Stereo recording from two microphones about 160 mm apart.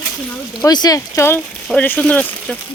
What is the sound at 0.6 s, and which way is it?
Speech, 25° left (ahead or behind).